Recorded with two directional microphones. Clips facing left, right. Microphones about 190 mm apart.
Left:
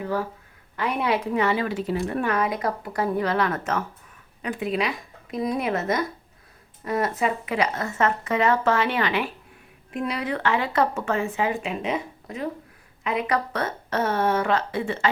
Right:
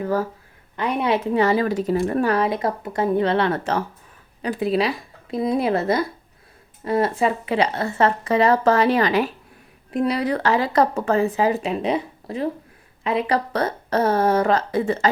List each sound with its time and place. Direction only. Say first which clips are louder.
0.0 s speech: right 4 dB; 45° right (ahead or behind)
0.8 s speech: right 3 dB; 20° right (ahead or behind); by 15.1 s 40° right (ahead or behind)